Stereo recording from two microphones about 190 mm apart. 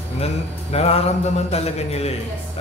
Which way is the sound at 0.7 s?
30° left (ahead or behind).